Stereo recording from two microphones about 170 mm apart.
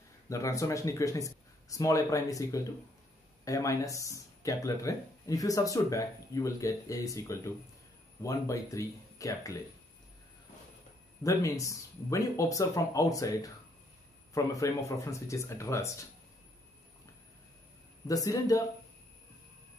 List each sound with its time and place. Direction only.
0.3 s speech: 20° left (ahead or behind)
11.2 s speech: 20° left (ahead or behind)
18.0 s speech: 20° left (ahead or behind)